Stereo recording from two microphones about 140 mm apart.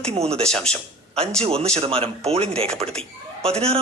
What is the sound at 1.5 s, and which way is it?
A man's voice, 45° right (ahead or behind).